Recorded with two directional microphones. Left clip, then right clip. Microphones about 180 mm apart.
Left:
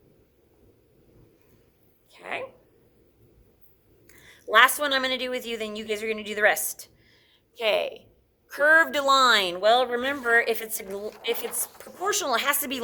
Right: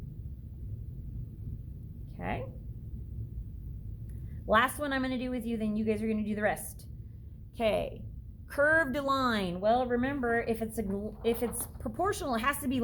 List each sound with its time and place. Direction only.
4.5 s a woman's voice: 20° left (ahead or behind)